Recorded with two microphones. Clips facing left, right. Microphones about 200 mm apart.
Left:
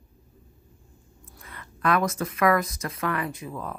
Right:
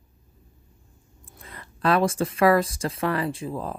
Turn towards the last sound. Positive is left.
turn(degrees=-30)  # may be behind; listen again after turning